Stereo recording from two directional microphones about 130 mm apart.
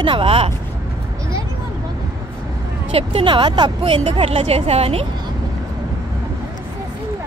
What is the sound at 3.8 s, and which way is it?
Speech, 45° right (ahead or behind).